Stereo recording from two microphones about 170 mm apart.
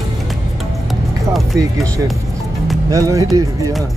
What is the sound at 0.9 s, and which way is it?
Music, centre (ahead or behind).